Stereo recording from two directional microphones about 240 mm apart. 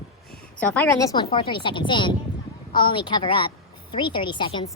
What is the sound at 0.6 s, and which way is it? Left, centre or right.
A woman's voice, centre.